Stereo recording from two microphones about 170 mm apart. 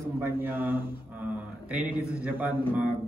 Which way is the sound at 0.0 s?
10° right (ahead or behind).